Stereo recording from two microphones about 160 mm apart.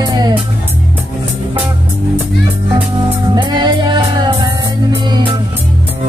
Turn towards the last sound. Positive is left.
turn(degrees=-30)  # may be behind; listen again after turning